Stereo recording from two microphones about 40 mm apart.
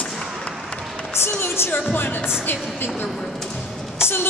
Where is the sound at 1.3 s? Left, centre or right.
Left.